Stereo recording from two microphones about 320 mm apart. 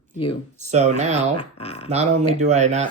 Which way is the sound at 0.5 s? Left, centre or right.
Right.